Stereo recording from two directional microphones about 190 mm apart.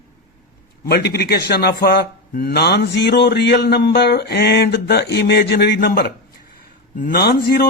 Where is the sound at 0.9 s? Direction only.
55° left (ahead or behind).